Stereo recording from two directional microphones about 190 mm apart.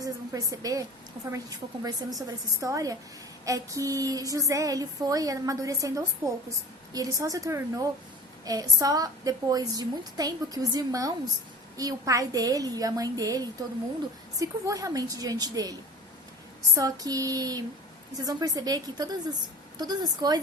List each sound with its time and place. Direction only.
0.0 s a woman's voice: 20° right (ahead or behind)
16.7 s a woman's voice: 20° right (ahead or behind)